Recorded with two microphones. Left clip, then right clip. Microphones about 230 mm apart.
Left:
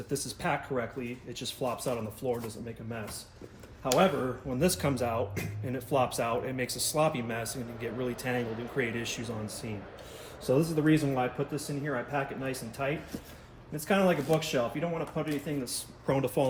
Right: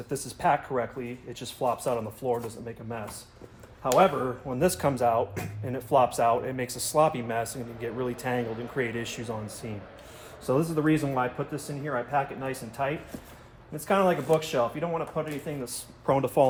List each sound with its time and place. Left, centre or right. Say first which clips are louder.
0.1 s speech: right 7 dB; right
3.9 s speech: right 4 dB; right